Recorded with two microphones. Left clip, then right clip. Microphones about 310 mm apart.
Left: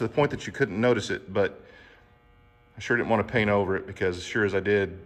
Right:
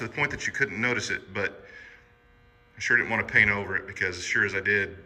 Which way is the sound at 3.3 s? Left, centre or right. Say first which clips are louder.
Right 2 dB; left.